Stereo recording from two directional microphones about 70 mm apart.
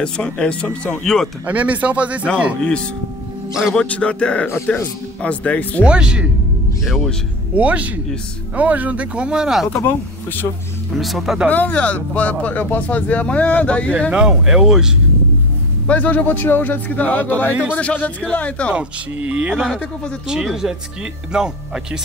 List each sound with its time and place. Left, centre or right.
0.0 s speech: centre
1.0 s speech: centre
1.4 s speech: right
3.7 s speech: centre
5.9 s speech: centre
7.5 s speech: right
9.8 s speech: left
11.0 s speech: centre
11.4 s speech: left
14.1 s speech: centre
15.9 s speech: left
18.7 s speech: centre